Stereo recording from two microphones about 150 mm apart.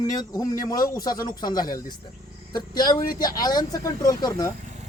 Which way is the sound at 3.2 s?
25° left (ahead or behind).